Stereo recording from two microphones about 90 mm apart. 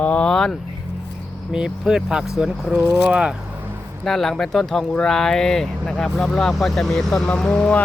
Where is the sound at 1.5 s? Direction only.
10° right (ahead or behind).